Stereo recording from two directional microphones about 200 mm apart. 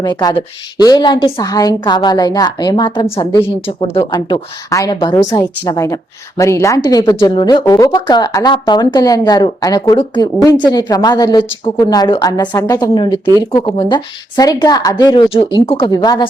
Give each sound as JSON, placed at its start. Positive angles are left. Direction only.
{"t": 0.0, "sound": "a woman's voice", "side_deg": 20}